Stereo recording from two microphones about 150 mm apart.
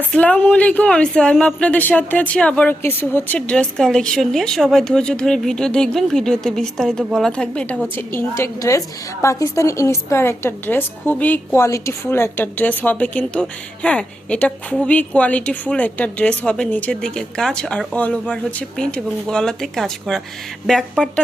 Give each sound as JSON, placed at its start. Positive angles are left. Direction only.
{"t": 0.1, "sound": "a woman's voice", "side_deg": 10}